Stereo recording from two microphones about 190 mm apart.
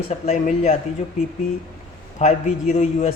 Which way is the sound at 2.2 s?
35° left (ahead or behind).